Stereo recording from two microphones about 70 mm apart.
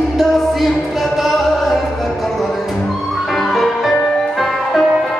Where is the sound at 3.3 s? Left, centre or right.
Centre.